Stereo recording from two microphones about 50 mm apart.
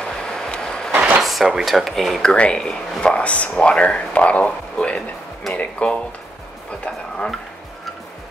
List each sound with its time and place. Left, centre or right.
0.0 s vehicle: centre
0.9 s drawer open or close: right
1.2 s speech: centre
2.2 s speech: centre